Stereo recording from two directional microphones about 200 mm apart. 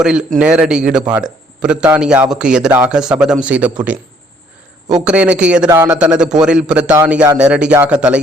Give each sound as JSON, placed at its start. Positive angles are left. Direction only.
{"t": 0.0, "sound": "a man's voice", "side_deg": -5}
{"t": 5.0, "sound": "speech", "side_deg": -5}
{"t": 5.6, "sound": "a man's voice", "side_deg": -20}
{"t": 5.9, "sound": "speech", "side_deg": -5}